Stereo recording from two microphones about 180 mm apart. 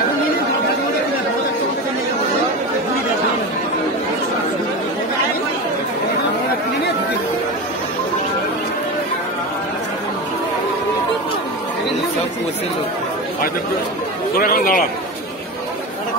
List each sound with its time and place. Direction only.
14.4 s a man's voice: 50° left (ahead or behind)